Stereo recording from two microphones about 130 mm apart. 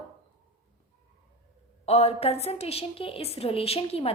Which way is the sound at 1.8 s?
50° left (ahead or behind).